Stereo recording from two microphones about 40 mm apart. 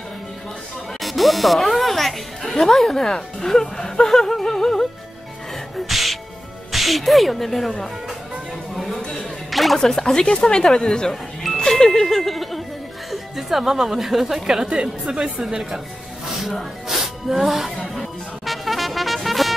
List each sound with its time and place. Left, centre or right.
1.0 s speech: centre
4.1 s a sound: centre
5.9 s music: centre
6.7 s speech: centre
8.7 s a sound: centre
9.5 s music: centre
9.8 s speech: centre
11.5 s music: centre
13.1 s a woman's voice: centre
16.3 s snake: centre
17.0 s music: centre